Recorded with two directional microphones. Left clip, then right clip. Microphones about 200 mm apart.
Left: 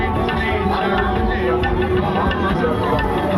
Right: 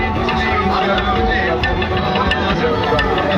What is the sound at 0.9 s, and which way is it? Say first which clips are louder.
Music: right 3 dB; 45° left (ahead or behind).